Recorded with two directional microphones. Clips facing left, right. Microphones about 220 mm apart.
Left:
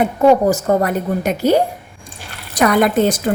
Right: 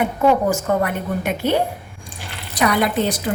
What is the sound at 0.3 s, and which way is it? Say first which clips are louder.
A woman's voice: left 5 dB; 40° left (ahead or behind).